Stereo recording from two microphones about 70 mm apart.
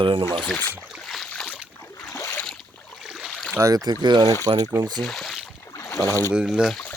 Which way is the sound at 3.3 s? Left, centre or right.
Centre.